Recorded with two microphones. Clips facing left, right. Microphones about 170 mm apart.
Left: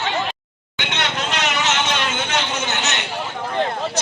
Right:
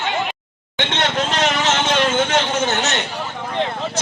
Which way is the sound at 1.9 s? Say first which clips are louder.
Right 6 dB; 45° right (ahead or behind).